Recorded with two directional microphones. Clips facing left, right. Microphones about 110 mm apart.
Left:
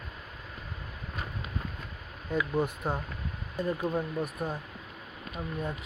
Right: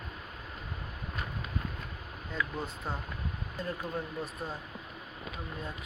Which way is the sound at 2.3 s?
15° left (ahead or behind).